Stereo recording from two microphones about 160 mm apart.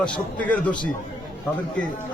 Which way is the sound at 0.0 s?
10° left (ahead or behind).